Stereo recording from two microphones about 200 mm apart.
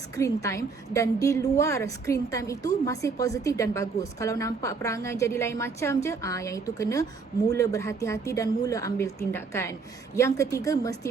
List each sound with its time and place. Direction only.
0.2 s a woman's voice: 15° left (ahead or behind)